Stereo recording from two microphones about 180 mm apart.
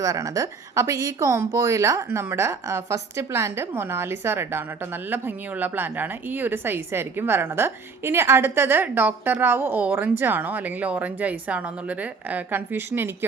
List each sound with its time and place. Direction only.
0.0 s a woman's voice: 20° right (ahead or behind)